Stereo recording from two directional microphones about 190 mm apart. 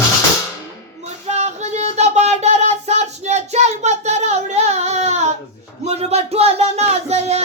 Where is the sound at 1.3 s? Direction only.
35° right (ahead or behind).